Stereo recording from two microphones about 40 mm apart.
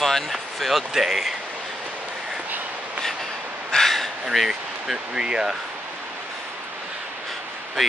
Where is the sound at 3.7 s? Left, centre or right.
Centre.